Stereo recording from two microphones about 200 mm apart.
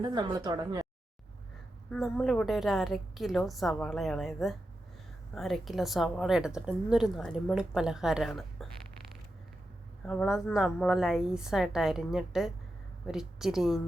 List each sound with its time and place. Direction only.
0.0 s speech: 20° right (ahead or behind)
1.9 s a woman's voice: centre (ahead or behind)
10.1 s a woman's voice: centre (ahead or behind)